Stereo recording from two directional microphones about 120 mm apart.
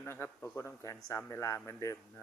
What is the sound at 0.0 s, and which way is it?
Speech, 20° left (ahead or behind).